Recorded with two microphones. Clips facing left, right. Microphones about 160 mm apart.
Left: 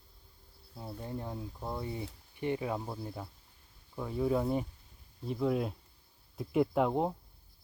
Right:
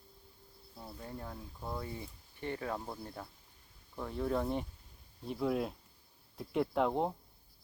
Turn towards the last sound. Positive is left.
turn(degrees=5)  # may be behind; listen again after turning